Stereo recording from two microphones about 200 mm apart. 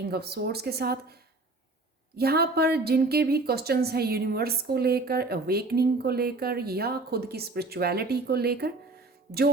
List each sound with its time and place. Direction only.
0.1 s a woman's voice: 55° right (ahead or behind)
2.1 s a woman's voice: 50° right (ahead or behind)